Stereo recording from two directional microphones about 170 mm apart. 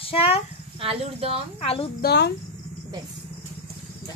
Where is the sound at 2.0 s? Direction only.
80° left.